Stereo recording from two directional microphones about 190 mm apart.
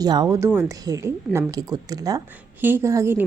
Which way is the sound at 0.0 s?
20° right (ahead or behind).